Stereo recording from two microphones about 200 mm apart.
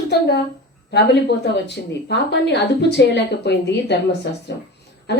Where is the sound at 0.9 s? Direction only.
55° left (ahead or behind).